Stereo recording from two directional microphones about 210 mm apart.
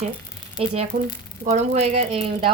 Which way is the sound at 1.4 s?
35° right (ahead or behind).